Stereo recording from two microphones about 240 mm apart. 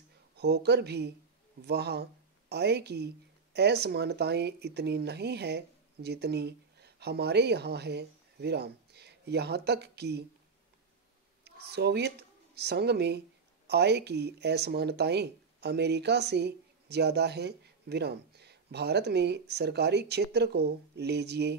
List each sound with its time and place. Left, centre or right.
0.4 s speech: right
11.4 s speech: right